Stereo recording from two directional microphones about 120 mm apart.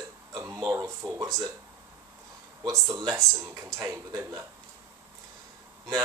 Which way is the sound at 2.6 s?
30° right (ahead or behind).